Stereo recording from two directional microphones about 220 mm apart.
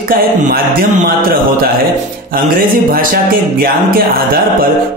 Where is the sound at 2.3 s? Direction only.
40° right (ahead or behind).